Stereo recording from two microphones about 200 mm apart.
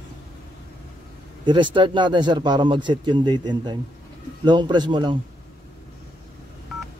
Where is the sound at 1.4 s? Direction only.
25° right (ahead or behind).